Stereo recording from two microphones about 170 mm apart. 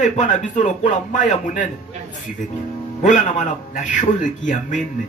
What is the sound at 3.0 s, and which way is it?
Speech, 45° left (ahead or behind).